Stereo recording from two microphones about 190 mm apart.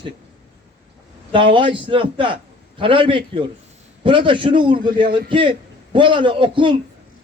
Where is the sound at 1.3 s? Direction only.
25° right (ahead or behind).